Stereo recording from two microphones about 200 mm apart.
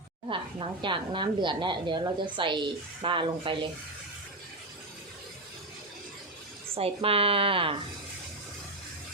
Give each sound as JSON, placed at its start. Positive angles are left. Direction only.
{"t": 0.3, "sound": "speech", "side_deg": -25}
{"t": 6.7, "sound": "speech", "side_deg": -30}